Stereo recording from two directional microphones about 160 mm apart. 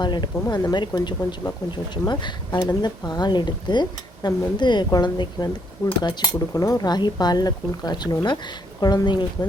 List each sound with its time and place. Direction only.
0.0 s speech: 30° left (ahead or behind)